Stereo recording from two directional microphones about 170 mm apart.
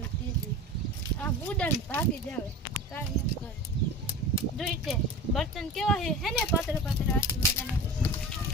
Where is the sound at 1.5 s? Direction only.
10° left (ahead or behind).